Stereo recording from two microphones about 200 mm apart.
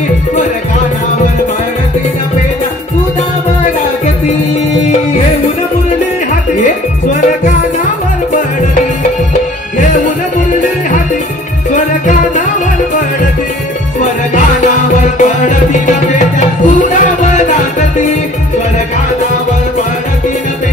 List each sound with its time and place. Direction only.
6.6 s music: 40° left (ahead or behind)
9.3 s music: 40° left (ahead or behind)
15.1 s music: 40° left (ahead or behind)